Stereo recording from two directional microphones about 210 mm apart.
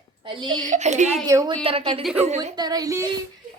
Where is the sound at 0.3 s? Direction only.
20° right (ahead or behind).